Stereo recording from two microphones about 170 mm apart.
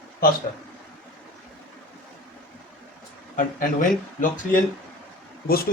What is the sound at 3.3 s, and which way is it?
Speech, 50° left (ahead or behind).